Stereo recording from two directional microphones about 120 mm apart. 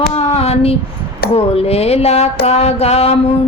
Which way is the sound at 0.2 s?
60° left (ahead or behind).